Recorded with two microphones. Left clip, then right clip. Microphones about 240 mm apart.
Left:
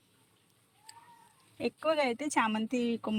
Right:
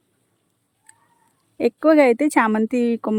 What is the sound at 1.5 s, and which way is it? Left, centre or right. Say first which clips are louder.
Speech: right 15 dB; right.